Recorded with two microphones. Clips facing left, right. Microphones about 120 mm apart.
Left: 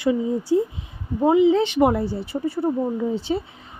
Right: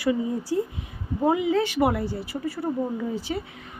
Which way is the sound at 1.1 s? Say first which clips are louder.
Left 6 dB; 20° left (ahead or behind).